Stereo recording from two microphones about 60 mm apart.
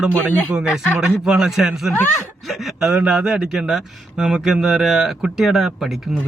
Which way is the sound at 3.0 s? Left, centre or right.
Centre.